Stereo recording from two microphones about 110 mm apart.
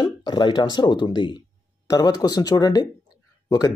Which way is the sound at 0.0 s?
45° left (ahead or behind).